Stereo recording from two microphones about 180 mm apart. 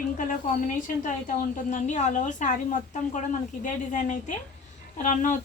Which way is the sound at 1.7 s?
40° left (ahead or behind).